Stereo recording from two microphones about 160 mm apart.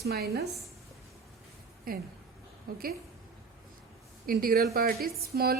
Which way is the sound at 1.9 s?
70° right (ahead or behind).